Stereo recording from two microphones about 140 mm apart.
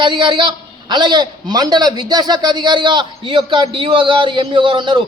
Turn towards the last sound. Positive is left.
turn(degrees=-35)  # may be behind; listen again after turning